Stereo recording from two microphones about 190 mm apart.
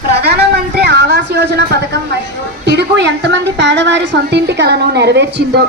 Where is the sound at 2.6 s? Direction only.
65° right (ahead or behind).